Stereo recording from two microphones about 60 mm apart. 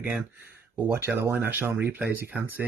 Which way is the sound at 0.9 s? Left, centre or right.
Right.